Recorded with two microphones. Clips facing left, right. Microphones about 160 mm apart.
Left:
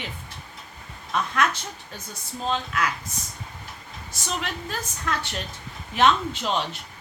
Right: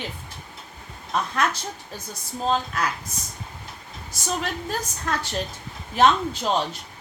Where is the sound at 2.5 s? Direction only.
40° right (ahead or behind).